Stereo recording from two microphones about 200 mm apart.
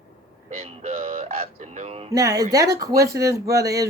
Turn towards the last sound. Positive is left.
turn(degrees=-15)  # may be behind; listen again after turning